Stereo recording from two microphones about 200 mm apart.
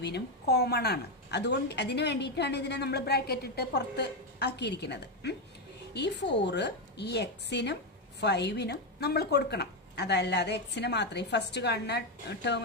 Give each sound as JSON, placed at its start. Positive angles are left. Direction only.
{"t": 0.0, "sound": "a woman's voice", "side_deg": 55}